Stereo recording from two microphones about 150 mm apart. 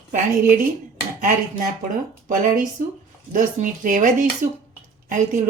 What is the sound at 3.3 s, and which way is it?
Speech, 60° right (ahead or behind).